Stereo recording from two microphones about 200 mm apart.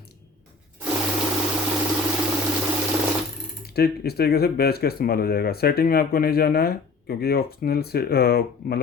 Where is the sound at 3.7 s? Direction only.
50° left (ahead or behind).